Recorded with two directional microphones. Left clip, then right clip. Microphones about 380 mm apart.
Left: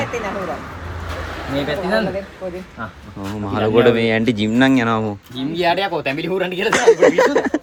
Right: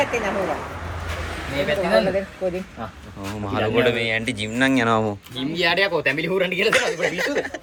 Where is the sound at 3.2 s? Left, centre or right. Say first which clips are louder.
Left 3 dB; centre.